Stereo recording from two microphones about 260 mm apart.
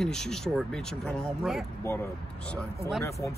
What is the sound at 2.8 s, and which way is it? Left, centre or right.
Speech, centre.